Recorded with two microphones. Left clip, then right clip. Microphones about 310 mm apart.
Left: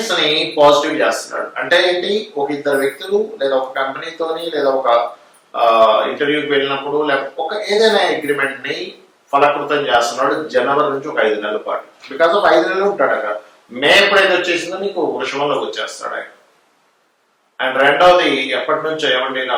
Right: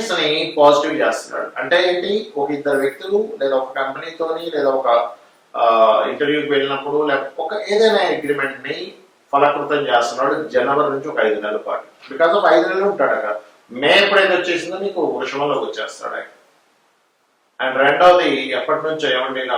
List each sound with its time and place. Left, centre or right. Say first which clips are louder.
0.0 s speech: left 3 dB; centre
0.5 s speech: left 1 dB; right
0.8 s speech: left 2 dB; centre
7.3 s speech: left 2 dB; centre
7.6 s speech: left 1 dB; centre
10.2 s speech: left 2 dB; centre
14.9 s speech: left 1 dB; right
15.2 s speech: left 2 dB; centre
17.6 s speech: left 1 dB; centre